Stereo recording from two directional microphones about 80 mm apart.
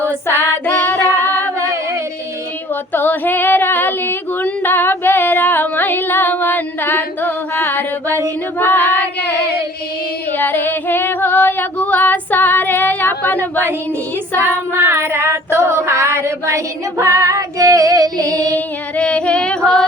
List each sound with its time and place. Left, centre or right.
0.0 s female singing: left
2.9 s female singing: left
10.3 s female singing: left
14.4 s female singing: right
18.5 s female singing: centre